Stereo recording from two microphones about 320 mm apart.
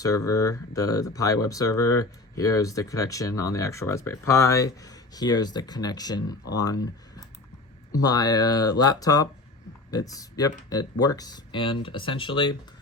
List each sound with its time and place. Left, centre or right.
0.3 s speech: centre
7.9 s speech: centre